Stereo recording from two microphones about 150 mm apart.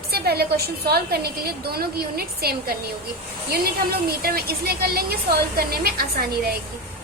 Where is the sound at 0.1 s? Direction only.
90° right.